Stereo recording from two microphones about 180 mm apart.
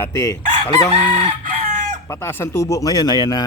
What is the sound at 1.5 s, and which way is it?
Chicken, 45° right (ahead or behind).